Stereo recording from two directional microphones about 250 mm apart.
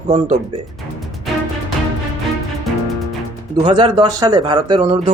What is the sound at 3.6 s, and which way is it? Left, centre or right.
A man's voice, centre.